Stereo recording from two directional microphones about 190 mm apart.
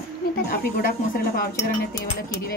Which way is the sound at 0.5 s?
50° left (ahead or behind).